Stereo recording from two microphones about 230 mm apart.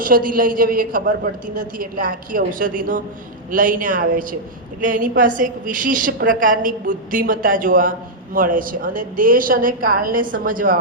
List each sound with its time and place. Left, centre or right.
0.0 s a woman's voice: right